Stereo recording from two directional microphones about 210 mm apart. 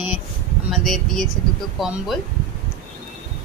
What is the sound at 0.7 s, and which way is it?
Speech, centre (ahead or behind).